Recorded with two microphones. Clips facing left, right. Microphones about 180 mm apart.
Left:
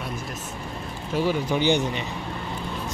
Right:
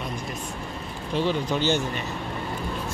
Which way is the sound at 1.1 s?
10° left (ahead or behind).